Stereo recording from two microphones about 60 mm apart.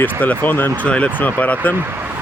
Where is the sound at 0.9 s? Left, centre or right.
Left.